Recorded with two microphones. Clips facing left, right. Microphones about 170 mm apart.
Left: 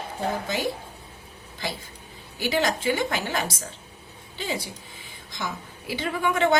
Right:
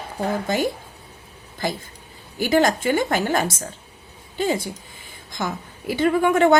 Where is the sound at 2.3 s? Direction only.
45° right (ahead or behind).